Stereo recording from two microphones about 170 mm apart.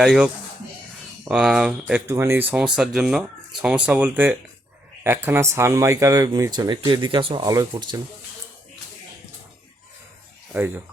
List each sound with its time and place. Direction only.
0.0 s speech: 5° right (ahead or behind)
1.9 s speech: 15° right (ahead or behind)
10.5 s speech: 10° right (ahead or behind)